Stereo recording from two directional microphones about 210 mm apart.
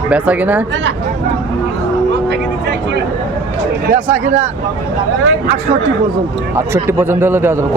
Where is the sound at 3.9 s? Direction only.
40° right (ahead or behind).